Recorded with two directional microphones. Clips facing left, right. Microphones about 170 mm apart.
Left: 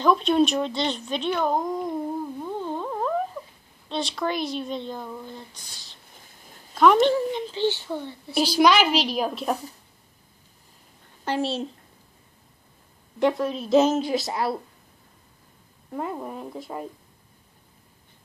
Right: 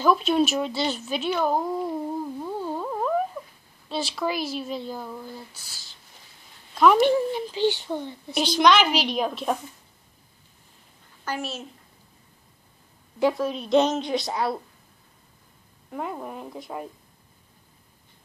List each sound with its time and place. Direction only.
0.0 s speech: 5° right (ahead or behind)
6.7 s a sound: centre (ahead or behind)
7.0 s a child's voice: 15° right (ahead or behind)
8.4 s speech: 5° left (ahead or behind)
11.2 s a child's voice: 30° left (ahead or behind)
13.2 s speech: centre (ahead or behind)
15.9 s speech: centre (ahead or behind)